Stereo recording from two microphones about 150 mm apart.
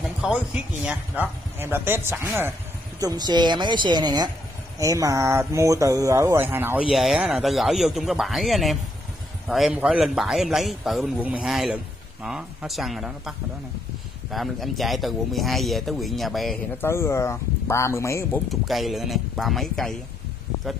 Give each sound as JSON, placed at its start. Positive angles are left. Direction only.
{"t": 0.2, "sound": "speech", "side_deg": -5}
{"t": 3.0, "sound": "speech", "side_deg": -25}
{"t": 6.9, "sound": "speech", "side_deg": 0}
{"t": 14.3, "sound": "speech", "side_deg": 0}
{"t": 16.7, "sound": "speech", "side_deg": 15}
{"t": 18.5, "sound": "speech", "side_deg": 0}